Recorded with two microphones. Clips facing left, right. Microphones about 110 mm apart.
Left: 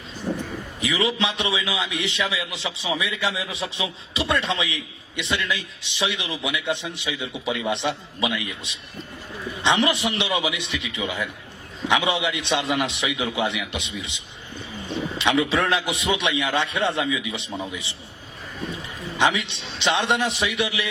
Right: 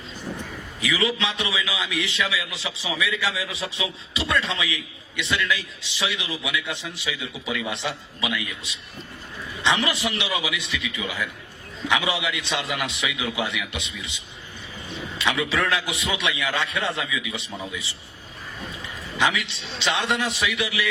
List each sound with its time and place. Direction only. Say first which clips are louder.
0.3 s a sound: left 6 dB; 40° left (ahead or behind)
0.8 s a man's voice: left 1 dB; 20° left (ahead or behind)
15.2 s a man's voice: left 3 dB; 20° left (ahead or behind)
19.1 s a man's voice: left 2 dB; 20° left (ahead or behind)